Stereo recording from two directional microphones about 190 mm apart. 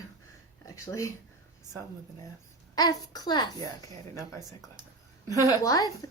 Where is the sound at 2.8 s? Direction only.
20° left (ahead or behind).